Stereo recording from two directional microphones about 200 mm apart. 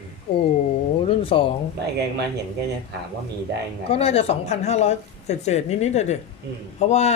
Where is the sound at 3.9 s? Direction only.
30° left (ahead or behind).